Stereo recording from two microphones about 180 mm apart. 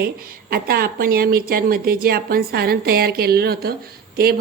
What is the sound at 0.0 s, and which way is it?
A woman's voice, 55° right (ahead or behind).